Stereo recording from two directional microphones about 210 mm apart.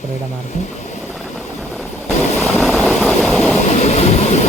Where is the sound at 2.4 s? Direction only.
Centre (ahead or behind).